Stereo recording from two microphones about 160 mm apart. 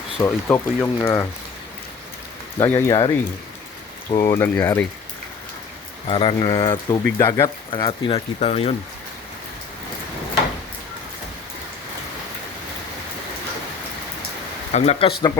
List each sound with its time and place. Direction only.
0.2 s speech: 15° left (ahead or behind)
2.6 s speech: 20° left (ahead or behind)
4.2 s speech: 15° left (ahead or behind)
6.1 s speech: 35° left (ahead or behind)
7.7 s speech: 35° left (ahead or behind)
14.7 s speech: 40° left (ahead or behind)